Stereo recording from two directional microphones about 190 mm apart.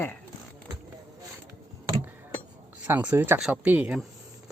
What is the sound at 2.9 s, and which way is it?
Speech, 10° right (ahead or behind).